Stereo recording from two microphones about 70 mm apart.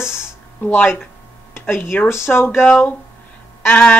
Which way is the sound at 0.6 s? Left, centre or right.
Left.